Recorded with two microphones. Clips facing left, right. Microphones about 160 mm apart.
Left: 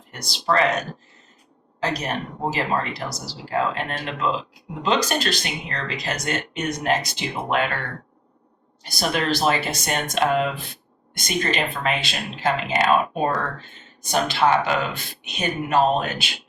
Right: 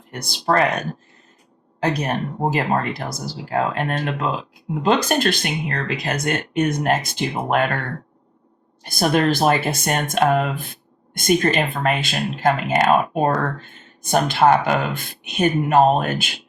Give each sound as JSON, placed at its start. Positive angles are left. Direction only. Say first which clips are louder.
{"t": 0.1, "sound": "speech", "louder": "right 3 dB", "side_deg": -50}
{"t": 8.8, "sound": "speech", "louder": "right 6 dB", "side_deg": -50}